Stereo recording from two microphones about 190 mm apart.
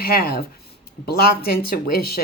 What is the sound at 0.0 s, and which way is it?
Speech, 50° left (ahead or behind).